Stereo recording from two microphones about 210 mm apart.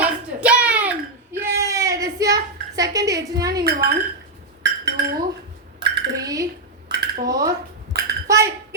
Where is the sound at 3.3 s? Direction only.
15° right (ahead or behind).